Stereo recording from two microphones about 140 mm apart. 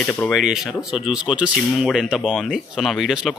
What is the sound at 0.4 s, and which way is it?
Speech, 5° right (ahead or behind).